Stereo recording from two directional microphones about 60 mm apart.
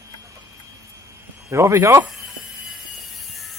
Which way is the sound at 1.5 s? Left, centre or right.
Right.